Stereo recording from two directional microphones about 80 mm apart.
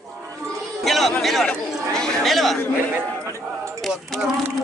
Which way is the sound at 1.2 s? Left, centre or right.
Centre.